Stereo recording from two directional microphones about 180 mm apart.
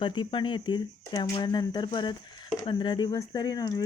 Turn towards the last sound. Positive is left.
turn(degrees=20)  # may be behind; listen again after turning